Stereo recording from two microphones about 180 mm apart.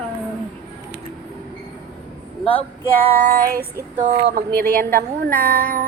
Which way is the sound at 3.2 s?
50° right (ahead or behind).